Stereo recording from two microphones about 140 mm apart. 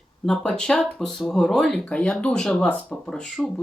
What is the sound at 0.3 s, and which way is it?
Speech, 5° left (ahead or behind).